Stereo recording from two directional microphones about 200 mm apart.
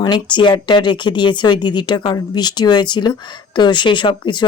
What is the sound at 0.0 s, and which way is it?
Speech, 20° left (ahead or behind).